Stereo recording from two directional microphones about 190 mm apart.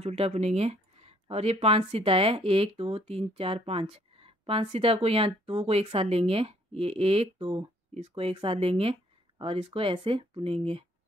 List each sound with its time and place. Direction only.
0.0 s speech: 35° right (ahead or behind)